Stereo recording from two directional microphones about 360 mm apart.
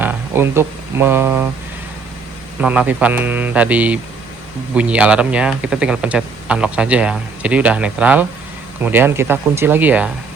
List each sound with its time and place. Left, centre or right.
0.0 s speech: centre
2.6 s speech: centre